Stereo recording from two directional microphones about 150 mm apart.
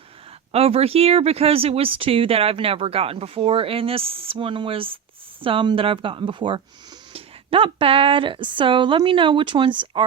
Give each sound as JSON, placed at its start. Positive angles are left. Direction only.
{"t": 0.5, "sound": "speech", "side_deg": -40}